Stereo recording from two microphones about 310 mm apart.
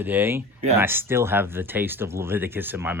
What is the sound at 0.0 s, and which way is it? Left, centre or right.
Speech, centre.